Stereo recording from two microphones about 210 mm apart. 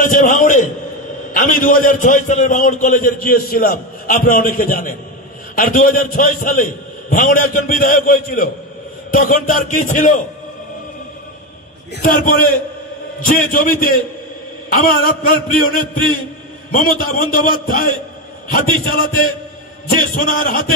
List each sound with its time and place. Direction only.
0.0 s a man's voice: 40° left (ahead or behind)
12.0 s a man's voice: 40° left (ahead or behind)